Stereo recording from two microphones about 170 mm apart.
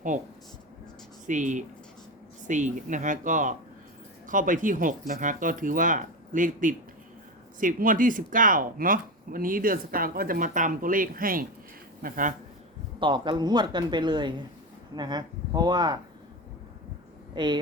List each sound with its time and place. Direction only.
1.3 s speech: 45° right (ahead or behind)
13.0 s speech: 30° right (ahead or behind)
17.3 s speech: 25° right (ahead or behind)